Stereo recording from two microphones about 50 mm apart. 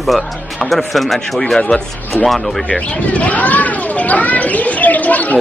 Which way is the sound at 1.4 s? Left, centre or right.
Centre.